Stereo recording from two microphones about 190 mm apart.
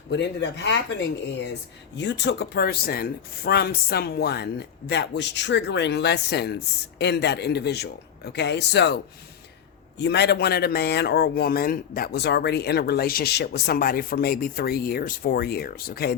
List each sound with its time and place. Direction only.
0.1 s a man's voice: 65° left (ahead or behind)
2.0 s a man's voice: 65° left (ahead or behind)
10.0 s a man's voice: 60° left (ahead or behind)